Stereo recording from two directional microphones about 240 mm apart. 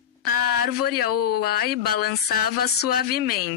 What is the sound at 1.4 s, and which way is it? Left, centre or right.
Speech, left.